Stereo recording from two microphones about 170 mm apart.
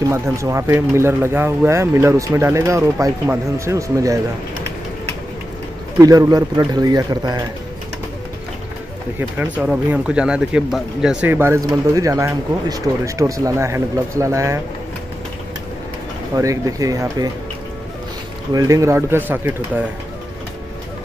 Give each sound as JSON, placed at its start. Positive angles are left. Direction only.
{"t": 0.1, "sound": "speech", "side_deg": -15}
{"t": 5.9, "sound": "speech", "side_deg": -20}
{"t": 9.4, "sound": "speech", "side_deg": -10}
{"t": 16.3, "sound": "speech", "side_deg": -20}
{"t": 18.5, "sound": "speech", "side_deg": -20}